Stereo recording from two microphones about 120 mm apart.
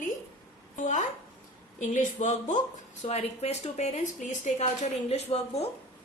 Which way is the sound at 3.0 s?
60° left (ahead or behind).